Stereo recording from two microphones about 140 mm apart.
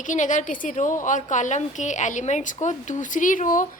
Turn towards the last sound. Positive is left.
turn(degrees=70)  # may be behind; listen again after turning